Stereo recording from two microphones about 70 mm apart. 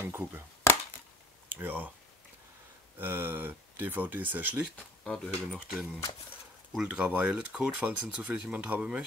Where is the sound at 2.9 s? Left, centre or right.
Right.